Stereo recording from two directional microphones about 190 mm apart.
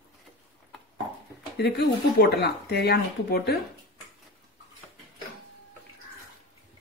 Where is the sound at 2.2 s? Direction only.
55° left (ahead or behind).